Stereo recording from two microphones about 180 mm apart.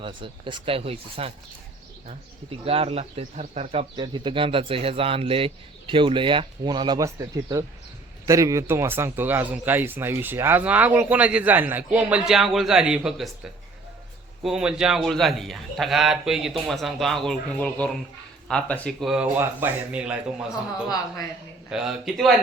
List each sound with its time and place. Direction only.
0.0 s speech: 25° right (ahead or behind)
2.6 s speech: 35° right (ahead or behind)
8.3 s a man's voice: 15° right (ahead or behind)
21.7 s a man's voice: centre (ahead or behind)